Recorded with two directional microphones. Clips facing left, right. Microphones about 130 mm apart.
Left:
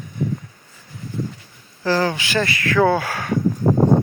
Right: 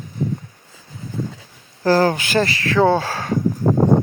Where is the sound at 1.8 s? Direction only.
40° right (ahead or behind).